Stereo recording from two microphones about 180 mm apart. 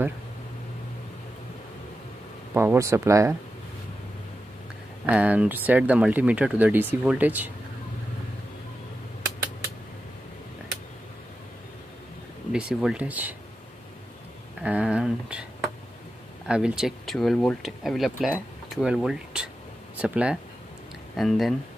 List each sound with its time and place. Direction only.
2.5 s speech: 15° right (ahead or behind)
5.0 s speech: 10° right (ahead or behind)
12.5 s speech: 5° right (ahead or behind)
14.6 s speech: 5° right (ahead or behind)